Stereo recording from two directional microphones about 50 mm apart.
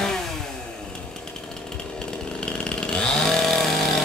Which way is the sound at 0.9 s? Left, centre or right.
Centre.